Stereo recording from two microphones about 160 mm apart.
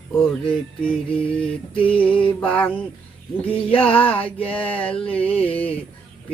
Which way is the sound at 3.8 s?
35° left (ahead or behind).